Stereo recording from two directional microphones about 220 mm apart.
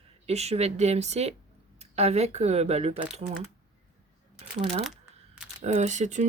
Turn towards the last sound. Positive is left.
turn(degrees=-35)  # may be behind; listen again after turning